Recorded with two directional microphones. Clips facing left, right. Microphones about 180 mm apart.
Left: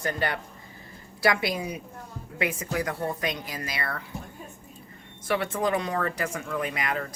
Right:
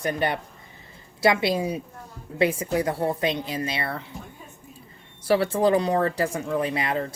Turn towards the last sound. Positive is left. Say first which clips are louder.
# right 4 dB
turn(degrees=-30)  # may be behind; listen again after turning